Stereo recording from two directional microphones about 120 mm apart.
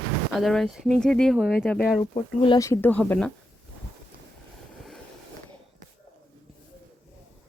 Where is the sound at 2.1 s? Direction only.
40° left (ahead or behind).